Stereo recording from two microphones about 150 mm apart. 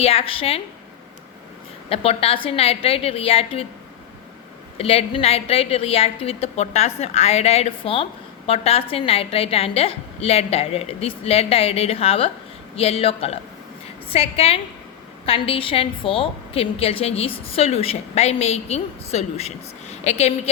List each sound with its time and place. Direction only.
0.0 s a woman's voice: 40° left (ahead or behind)
1.9 s a woman's voice: 40° left (ahead or behind)
4.8 s a woman's voice: 40° left (ahead or behind)